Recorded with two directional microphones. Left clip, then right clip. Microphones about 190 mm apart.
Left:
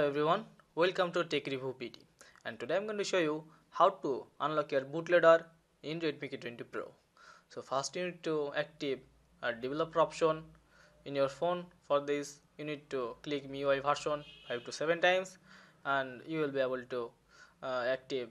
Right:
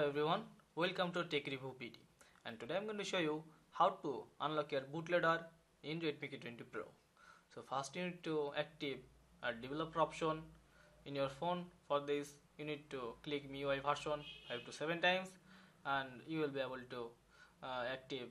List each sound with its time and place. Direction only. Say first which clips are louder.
0.0 s a man's voice: left 7 dB; 30° left (ahead or behind)